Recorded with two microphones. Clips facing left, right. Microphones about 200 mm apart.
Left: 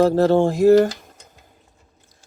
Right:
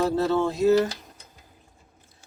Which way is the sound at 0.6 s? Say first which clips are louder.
Left 6 dB; 50° left (ahead or behind).